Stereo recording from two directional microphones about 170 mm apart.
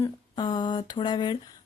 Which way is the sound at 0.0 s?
25° left (ahead or behind).